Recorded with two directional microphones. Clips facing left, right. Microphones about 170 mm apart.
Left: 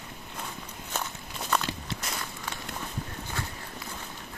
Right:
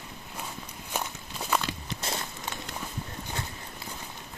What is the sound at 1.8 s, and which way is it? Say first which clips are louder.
Walk: right 1 dB; 25° right (ahead or behind).